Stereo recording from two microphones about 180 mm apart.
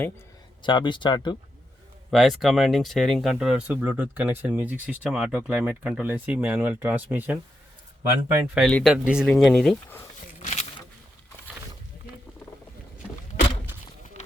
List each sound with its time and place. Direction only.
0.6 s speech: 25° left (ahead or behind)
2.0 s speech: centre (ahead or behind)
8.5 s speech: centre (ahead or behind)
10.4 s a sound: 40° left (ahead or behind)